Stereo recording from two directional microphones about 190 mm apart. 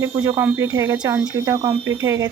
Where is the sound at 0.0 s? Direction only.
15° right (ahead or behind).